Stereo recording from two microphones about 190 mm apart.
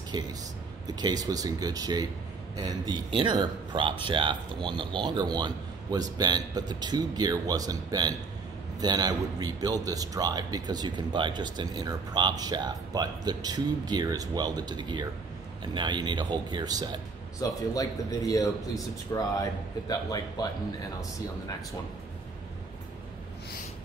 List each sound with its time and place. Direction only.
0.1 s a man's voice: 20° right (ahead or behind)
17.4 s speech: 20° left (ahead or behind)